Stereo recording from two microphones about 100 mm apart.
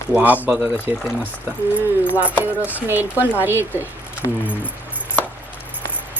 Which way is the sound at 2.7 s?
20° right (ahead or behind).